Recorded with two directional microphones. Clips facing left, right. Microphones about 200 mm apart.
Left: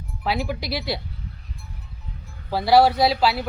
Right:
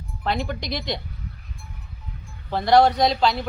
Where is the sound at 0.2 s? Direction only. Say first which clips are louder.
Left 1 dB; 5° left (ahead or behind).